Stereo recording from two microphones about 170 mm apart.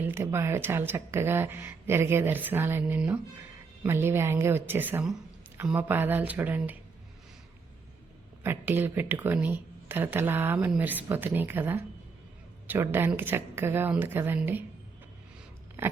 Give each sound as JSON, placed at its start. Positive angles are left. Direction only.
{"t": 0.0, "sound": "speech", "side_deg": -15}
{"t": 8.4, "sound": "speech", "side_deg": -10}
{"t": 15.8, "sound": "biting", "side_deg": -15}